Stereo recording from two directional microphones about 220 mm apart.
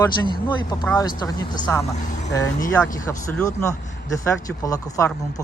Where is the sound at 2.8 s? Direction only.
5° left (ahead or behind).